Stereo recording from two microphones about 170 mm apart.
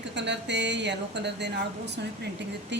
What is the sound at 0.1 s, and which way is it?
A woman's voice, 90° right.